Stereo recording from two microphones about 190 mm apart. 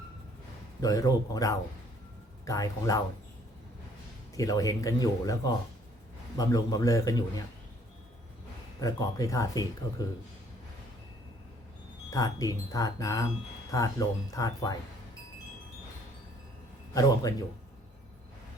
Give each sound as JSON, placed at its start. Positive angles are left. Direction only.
{"t": 0.8, "sound": "a man's voice", "side_deg": 20}
{"t": 4.4, "sound": "a man's voice", "side_deg": 20}
{"t": 8.8, "sound": "speech", "side_deg": 20}
{"t": 12.1, "sound": "speech", "side_deg": 20}
{"t": 16.9, "sound": "speech", "side_deg": 20}